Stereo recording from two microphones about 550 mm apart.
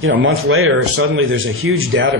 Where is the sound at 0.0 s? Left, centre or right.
Right.